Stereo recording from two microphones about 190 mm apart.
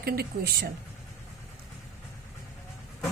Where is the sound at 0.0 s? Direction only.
55° right (ahead or behind).